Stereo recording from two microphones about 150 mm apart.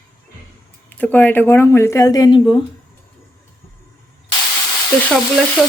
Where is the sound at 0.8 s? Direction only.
10° left (ahead or behind); by 2.5 s 25° left (ahead or behind).